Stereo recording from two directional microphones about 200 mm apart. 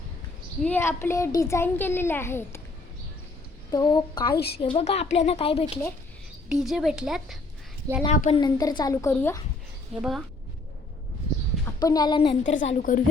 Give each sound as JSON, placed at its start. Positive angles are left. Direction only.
{"t": 0.6, "sound": "a child's voice", "side_deg": 10}
{"t": 3.7, "sound": "a child's voice", "side_deg": 20}
{"t": 6.5, "sound": "speech", "side_deg": 0}
{"t": 8.0, "sound": "speech", "side_deg": 35}
{"t": 8.4, "sound": "a child's voice", "side_deg": 20}
{"t": 10.0, "sound": "speech", "side_deg": 0}
{"t": 11.6, "sound": "speech", "side_deg": 20}
{"t": 12.4, "sound": "speech", "side_deg": 35}